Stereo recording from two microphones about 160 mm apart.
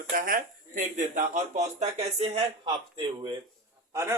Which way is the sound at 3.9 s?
20° right (ahead or behind).